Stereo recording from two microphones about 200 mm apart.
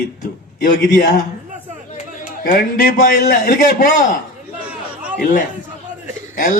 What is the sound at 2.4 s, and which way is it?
A man's voice, 45° left (ahead or behind).